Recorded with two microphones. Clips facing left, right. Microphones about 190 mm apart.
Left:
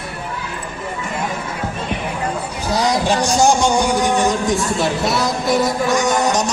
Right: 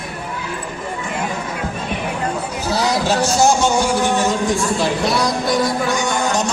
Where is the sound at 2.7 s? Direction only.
15° left (ahead or behind).